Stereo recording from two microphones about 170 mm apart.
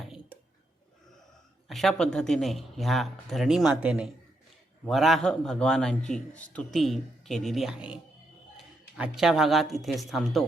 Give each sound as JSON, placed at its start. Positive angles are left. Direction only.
{"t": 1.6, "sound": "a man's voice", "side_deg": 0}